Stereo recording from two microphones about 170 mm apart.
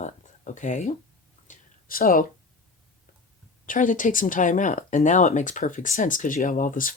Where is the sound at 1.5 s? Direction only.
55° left (ahead or behind).